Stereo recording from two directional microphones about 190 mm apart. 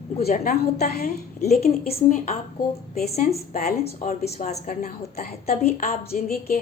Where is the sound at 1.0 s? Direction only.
35° left (ahead or behind).